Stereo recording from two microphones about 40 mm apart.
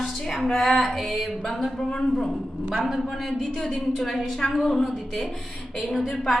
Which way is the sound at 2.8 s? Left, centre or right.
Centre.